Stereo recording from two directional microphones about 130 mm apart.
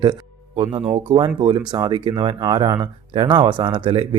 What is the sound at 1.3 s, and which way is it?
Speech, 35° right (ahead or behind).